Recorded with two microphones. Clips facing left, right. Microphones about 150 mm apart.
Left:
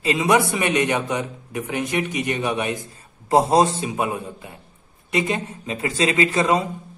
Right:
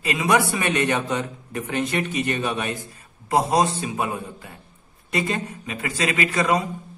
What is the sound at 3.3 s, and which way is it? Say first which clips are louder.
A man's voice: left 3 dB; 30° left (ahead or behind).